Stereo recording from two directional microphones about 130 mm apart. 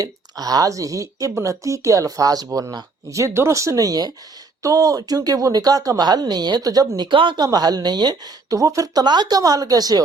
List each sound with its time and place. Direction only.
0.0 s speech: 30° right (ahead or behind)